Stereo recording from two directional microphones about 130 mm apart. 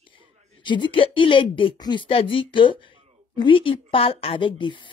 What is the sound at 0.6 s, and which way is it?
A woman's voice, 35° left (ahead or behind).